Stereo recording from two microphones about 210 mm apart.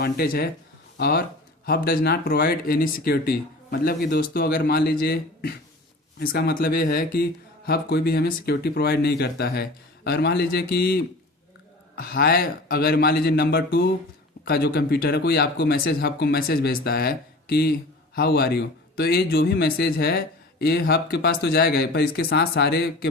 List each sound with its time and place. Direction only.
0.0 s speech: 45° left (ahead or behind)